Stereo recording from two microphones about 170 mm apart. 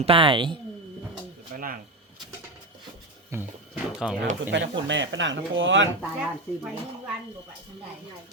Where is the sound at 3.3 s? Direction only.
15° right (ahead or behind).